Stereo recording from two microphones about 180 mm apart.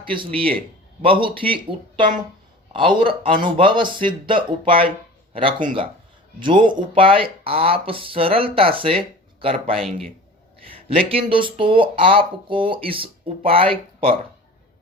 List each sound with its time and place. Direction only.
0.0 s speech: 30° right (ahead or behind)
5.5 s speech: 50° right (ahead or behind)
6.4 s speech: 25° right (ahead or behind)
10.8 s speech: 30° right (ahead or behind)